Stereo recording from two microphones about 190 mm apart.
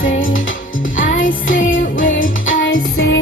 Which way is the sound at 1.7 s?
85° left.